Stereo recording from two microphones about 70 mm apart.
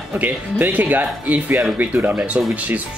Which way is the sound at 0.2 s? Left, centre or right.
Right.